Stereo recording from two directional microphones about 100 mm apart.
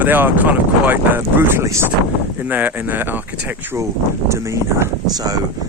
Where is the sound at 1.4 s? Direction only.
25° right (ahead or behind).